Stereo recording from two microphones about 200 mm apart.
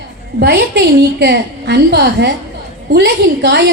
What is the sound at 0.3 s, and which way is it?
A woman's voice, 55° right (ahead or behind).